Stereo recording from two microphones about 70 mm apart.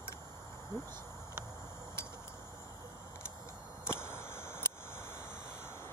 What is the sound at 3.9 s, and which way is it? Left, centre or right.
Arrow, left.